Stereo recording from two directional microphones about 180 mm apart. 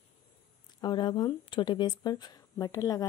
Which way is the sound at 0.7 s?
25° left (ahead or behind).